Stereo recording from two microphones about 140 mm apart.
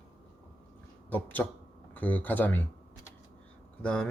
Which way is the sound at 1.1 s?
10° left (ahead or behind).